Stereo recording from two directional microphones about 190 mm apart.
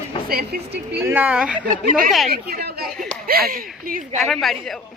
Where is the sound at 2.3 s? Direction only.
55° right (ahead or behind).